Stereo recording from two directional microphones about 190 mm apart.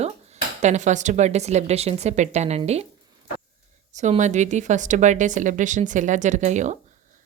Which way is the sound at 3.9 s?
40° right (ahead or behind).